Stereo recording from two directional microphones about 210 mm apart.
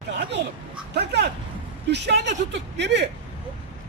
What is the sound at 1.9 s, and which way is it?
Speech, 55° right (ahead or behind).